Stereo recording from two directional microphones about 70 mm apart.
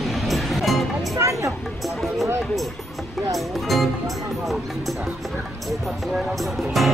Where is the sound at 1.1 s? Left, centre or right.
Right.